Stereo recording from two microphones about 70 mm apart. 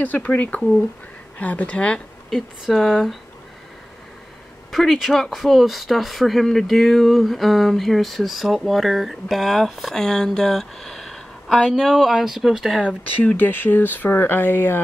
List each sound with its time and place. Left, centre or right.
0.0 s speech: left
2.6 s speech: centre
4.6 s speech: centre
13.2 s speech: left